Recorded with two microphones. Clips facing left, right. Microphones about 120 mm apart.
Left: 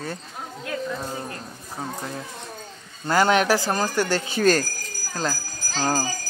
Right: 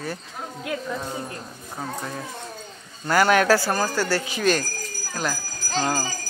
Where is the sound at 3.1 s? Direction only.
20° left (ahead or behind).